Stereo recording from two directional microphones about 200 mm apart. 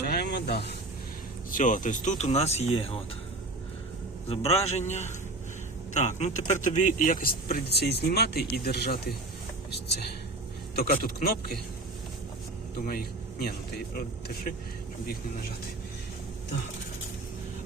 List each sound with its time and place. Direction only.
0.0 s snake: 55° left (ahead or behind)
1.5 s speech: 40° left (ahead or behind)
4.3 s speech: 30° left (ahead or behind); by 9.1 s 50° left (ahead or behind)
10.8 s speech: 50° left (ahead or behind)
12.9 s a man's voice: 50° left (ahead or behind)